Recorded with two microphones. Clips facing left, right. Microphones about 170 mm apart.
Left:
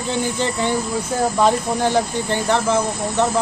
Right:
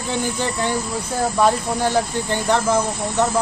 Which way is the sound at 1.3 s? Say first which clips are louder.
Even; 15° left (ahead or behind).